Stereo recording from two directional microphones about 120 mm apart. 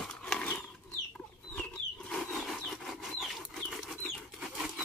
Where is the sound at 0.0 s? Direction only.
5° left (ahead or behind).